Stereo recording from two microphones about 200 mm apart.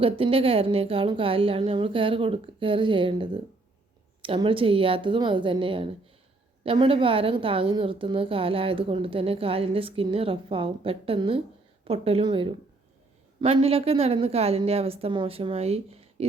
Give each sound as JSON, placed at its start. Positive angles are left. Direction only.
{"t": 0.0, "sound": "a woman's voice", "side_deg": -25}